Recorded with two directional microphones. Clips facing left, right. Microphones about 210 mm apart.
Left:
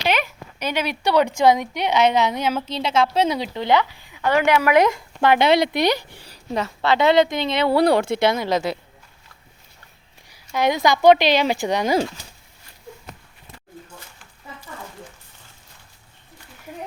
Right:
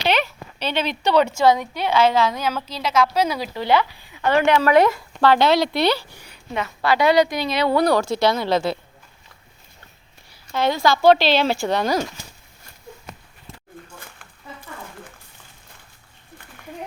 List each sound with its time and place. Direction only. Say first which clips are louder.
0.0 s a woman's voice: right 1 dB; 10° left (ahead or behind); by 6.7 s 35° left (ahead or behind)
6.8 s a woman's voice: even; 25° left (ahead or behind)
10.5 s speech: even; 15° left (ahead or behind)
13.8 s a sound: left 1 dB; 55° right (ahead or behind)